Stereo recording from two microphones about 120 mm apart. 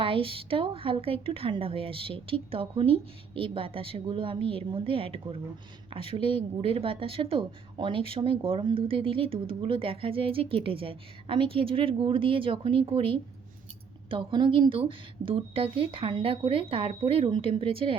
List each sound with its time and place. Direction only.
0.0 s speech: 50° right (ahead or behind)